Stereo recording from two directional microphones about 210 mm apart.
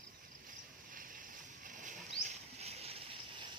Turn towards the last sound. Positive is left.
turn(degrees=-25)  # may be behind; listen again after turning